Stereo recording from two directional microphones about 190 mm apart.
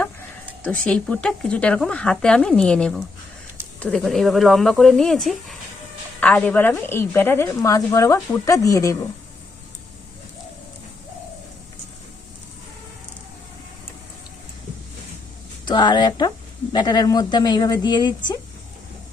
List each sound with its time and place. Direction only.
0.6 s a woman's voice: 5° left (ahead or behind)
15.6 s speech: 25° left (ahead or behind)